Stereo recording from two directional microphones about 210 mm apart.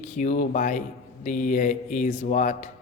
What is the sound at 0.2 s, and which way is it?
A man's voice, 35° left (ahead or behind).